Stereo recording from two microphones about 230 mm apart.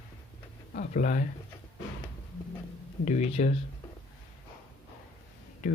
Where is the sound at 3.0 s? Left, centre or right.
Left.